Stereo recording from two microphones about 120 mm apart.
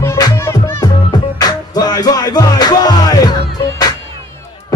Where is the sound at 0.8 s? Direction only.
35° left (ahead or behind).